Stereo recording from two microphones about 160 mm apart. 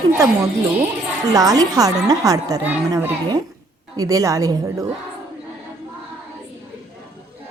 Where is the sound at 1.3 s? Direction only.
25° right (ahead or behind).